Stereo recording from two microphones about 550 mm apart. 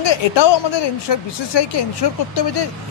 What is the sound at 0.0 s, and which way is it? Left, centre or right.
A woman's voice, left.